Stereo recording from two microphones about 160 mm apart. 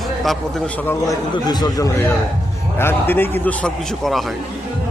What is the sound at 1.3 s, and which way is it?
A man's voice, 25° left (ahead or behind).